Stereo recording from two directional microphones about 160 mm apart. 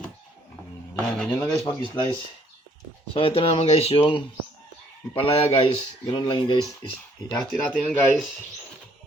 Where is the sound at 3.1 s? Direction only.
35° left (ahead or behind).